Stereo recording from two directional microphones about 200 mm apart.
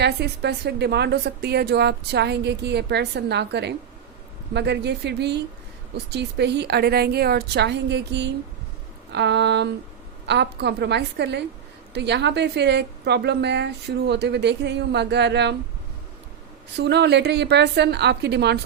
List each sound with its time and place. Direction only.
0.0 s a woman's voice: 55° right (ahead or behind)
16.7 s a woman's voice: 55° right (ahead or behind)